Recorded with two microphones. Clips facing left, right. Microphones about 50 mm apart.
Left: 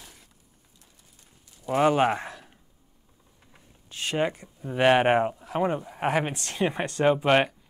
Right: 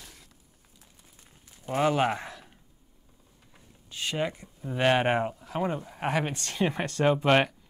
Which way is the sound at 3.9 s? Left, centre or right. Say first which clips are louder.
Left 4 dB; left.